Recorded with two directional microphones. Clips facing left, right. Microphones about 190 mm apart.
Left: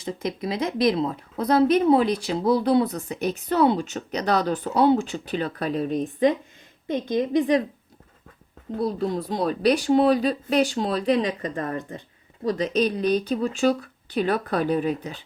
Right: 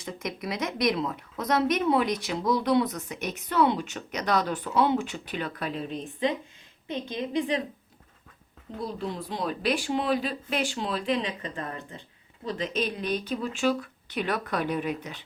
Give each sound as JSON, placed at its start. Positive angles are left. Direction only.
{"t": 0.0, "sound": "a woman's voice", "side_deg": 30}
{"t": 8.8, "sound": "a woman's voice", "side_deg": 40}